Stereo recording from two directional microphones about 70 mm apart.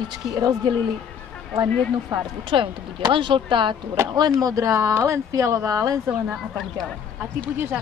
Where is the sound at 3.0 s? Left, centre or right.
Right.